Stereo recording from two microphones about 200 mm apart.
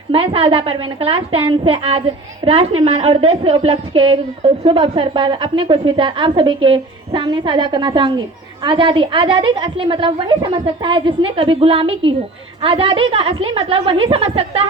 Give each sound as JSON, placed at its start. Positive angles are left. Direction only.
{"t": 0.1, "sound": "a woman's voice", "side_deg": -30}